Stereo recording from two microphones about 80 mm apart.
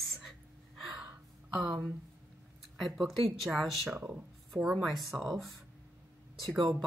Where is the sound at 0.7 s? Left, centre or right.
Centre.